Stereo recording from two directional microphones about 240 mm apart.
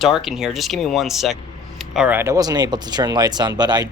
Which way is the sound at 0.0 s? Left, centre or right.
Centre.